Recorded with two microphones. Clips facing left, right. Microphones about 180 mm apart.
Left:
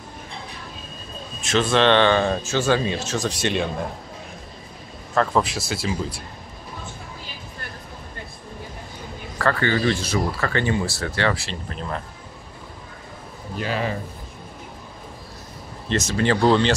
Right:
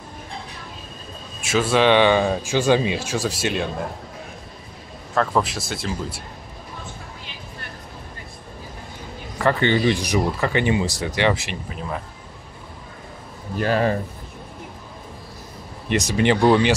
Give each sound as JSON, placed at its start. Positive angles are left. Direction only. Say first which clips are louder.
{"t": 1.4, "sound": "speech", "louder": "right 1 dB", "side_deg": -10}
{"t": 5.1, "sound": "speech", "louder": "even", "side_deg": 0}
{"t": 9.4, "sound": "speech", "louder": "right 2 dB", "side_deg": -20}
{"t": 11.7, "sound": "speech", "louder": "even", "side_deg": -5}
{"t": 13.6, "sound": "speech", "louder": "right 6 dB", "side_deg": -45}
{"t": 15.9, "sound": "speech", "louder": "right 2 dB", "side_deg": -15}